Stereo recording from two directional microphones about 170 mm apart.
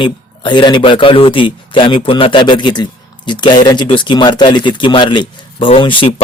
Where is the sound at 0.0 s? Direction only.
30° left (ahead or behind).